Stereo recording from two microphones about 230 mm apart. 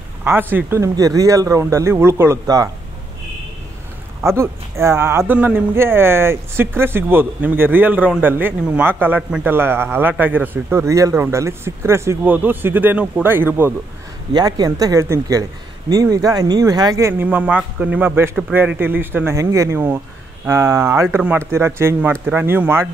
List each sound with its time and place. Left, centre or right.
0.2 s a man's voice: centre
4.2 s a man's voice: centre